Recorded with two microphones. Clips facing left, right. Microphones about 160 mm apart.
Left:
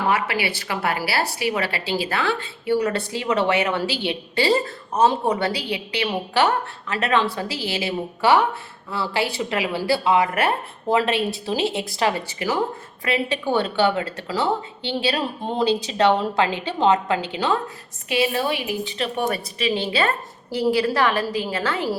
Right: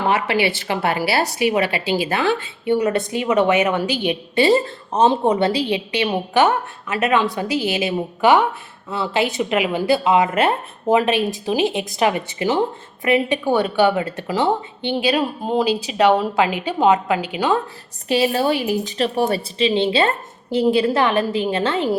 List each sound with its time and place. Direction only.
0.1 s a woman's voice: 25° right (ahead or behind)
18.1 s a woman's voice: 35° right (ahead or behind)